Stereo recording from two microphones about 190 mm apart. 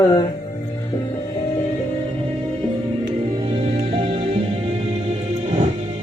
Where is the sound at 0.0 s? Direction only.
25° left (ahead or behind).